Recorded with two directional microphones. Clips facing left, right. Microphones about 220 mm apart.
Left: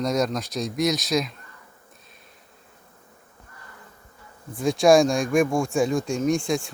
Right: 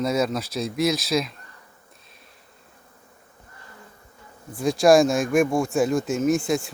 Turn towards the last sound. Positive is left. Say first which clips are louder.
# right 1 dB
turn(degrees=0)  # may be behind; listen again after turning